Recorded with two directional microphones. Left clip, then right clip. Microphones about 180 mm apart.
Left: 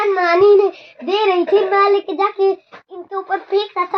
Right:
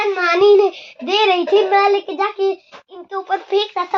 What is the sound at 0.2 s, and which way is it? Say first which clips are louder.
Child singing: even; 20° right (ahead or behind).